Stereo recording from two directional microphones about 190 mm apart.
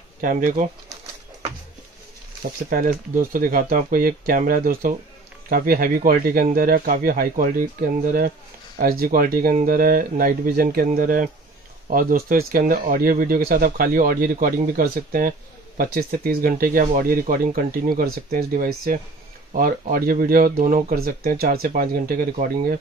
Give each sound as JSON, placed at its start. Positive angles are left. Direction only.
{"t": 0.2, "sound": "speech", "side_deg": -45}
{"t": 2.7, "sound": "speech", "side_deg": -45}